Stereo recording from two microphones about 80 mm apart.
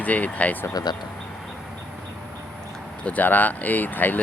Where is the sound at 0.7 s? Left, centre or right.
Left.